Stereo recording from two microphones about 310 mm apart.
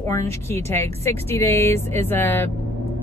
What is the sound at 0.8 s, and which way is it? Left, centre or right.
Speech, centre.